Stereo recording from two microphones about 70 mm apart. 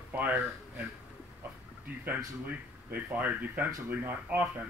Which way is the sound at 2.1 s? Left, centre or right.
Right.